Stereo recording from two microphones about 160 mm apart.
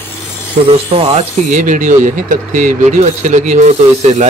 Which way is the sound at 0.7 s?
35° right (ahead or behind).